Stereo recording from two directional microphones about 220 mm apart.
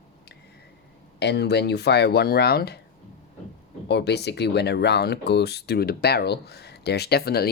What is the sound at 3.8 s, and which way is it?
Speech, 50° left (ahead or behind).